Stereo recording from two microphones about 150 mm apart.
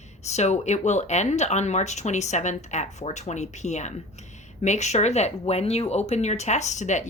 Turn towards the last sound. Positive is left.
turn(degrees=50)  # may be behind; listen again after turning